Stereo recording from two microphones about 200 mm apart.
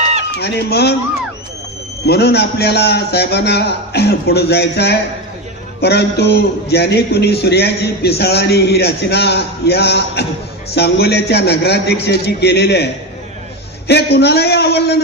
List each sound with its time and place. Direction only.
0.4 s a man's voice: 55° left (ahead or behind)
2.0 s a man's voice: 55° left (ahead or behind)